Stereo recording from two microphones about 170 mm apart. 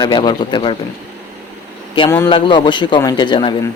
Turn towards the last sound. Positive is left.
turn(degrees=30)  # may be behind; listen again after turning